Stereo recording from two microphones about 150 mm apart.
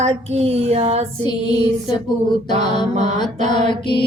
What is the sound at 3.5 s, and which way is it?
Mantra, 30° left (ahead or behind).